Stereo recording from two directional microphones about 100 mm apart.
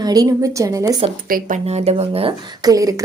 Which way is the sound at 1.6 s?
90° right.